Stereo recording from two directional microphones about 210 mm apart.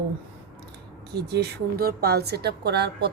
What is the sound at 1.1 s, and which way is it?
A woman's voice, 50° right (ahead or behind).